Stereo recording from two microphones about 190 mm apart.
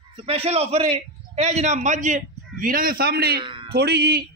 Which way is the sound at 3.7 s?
60° right (ahead or behind).